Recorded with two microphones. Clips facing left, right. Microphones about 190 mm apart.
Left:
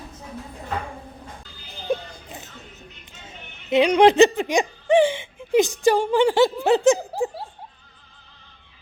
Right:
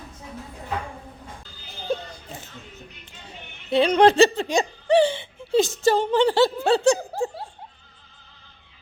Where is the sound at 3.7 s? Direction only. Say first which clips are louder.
Left 1 dB; 15° left (ahead or behind).